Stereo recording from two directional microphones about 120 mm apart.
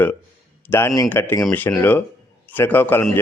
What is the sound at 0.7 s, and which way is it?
A man's voice, 25° left (ahead or behind).